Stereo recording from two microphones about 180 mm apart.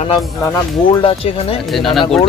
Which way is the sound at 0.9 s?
30° left (ahead or behind).